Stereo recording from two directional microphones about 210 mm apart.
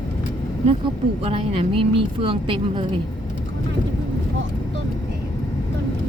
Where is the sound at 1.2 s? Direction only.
25° right (ahead or behind).